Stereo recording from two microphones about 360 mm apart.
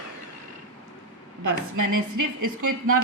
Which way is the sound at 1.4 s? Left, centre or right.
Right.